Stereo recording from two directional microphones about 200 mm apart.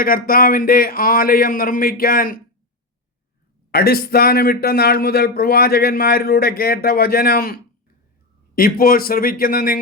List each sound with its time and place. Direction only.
0.0 s speech: 45° left (ahead or behind)
3.7 s speech: 50° left (ahead or behind)